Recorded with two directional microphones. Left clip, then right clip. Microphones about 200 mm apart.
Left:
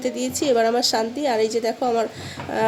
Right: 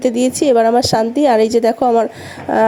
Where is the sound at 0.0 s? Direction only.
40° right (ahead or behind).